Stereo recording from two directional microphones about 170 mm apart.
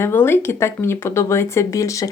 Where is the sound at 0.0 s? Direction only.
15° left (ahead or behind).